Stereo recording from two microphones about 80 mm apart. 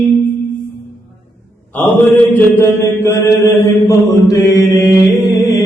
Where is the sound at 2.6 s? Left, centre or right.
Left.